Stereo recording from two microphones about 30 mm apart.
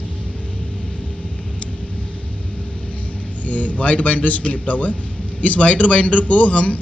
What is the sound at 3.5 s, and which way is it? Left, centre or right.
A man's voice, left.